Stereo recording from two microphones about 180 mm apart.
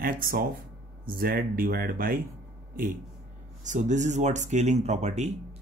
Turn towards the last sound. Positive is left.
turn(degrees=-40)  # may be behind; listen again after turning